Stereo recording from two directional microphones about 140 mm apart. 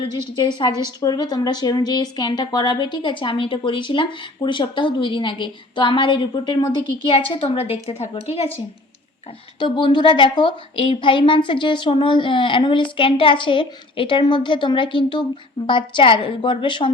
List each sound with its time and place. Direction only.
0.0 s a woman's voice: 35° left (ahead or behind); by 8.4 s 50° left (ahead or behind)
9.6 s a woman's voice: 35° left (ahead or behind)